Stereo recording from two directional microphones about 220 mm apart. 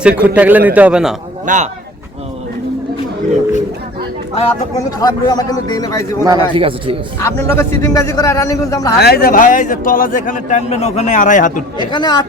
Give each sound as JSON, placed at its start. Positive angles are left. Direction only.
{"t": 0.0, "sound": "a man's voice", "side_deg": -5}
{"t": 1.5, "sound": "speech", "side_deg": -35}
{"t": 4.9, "sound": "a man's voice", "side_deg": 15}
{"t": 6.2, "sound": "speech", "side_deg": -20}
{"t": 7.2, "sound": "a man's voice", "side_deg": 10}
{"t": 9.0, "sound": "a man's voice", "side_deg": 45}
{"t": 11.9, "sound": "a man's voice", "side_deg": 20}